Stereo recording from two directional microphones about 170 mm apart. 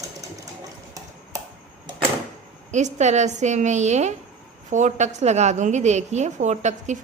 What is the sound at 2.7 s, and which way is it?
A woman's voice, 45° right (ahead or behind).